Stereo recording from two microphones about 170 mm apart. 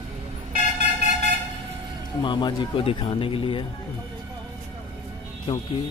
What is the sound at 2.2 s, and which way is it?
Speech, 30° left (ahead or behind).